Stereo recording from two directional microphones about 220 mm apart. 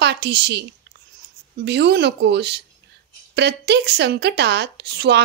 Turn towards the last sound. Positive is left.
turn(degrees=-50)  # may be behind; listen again after turning